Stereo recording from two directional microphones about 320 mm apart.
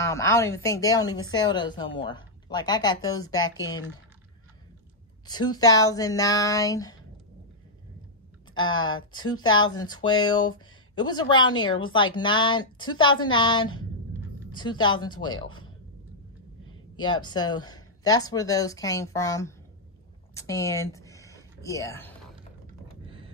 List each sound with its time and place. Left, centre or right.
0.0 s a woman's voice: centre
5.2 s a woman's voice: centre
8.5 s a woman's voice: centre
8.9 s speech: left
9.3 s a woman's voice: centre
16.9 s a woman's voice: centre
23.0 s a sound: centre